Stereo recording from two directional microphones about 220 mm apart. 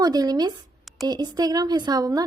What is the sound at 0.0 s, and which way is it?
A woman's voice, 20° right (ahead or behind).